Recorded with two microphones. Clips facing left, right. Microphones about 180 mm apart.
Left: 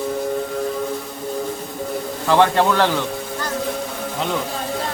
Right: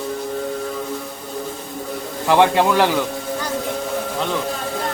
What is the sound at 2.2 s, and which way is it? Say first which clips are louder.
Speech: right 1 dB; 15° right (ahead or behind).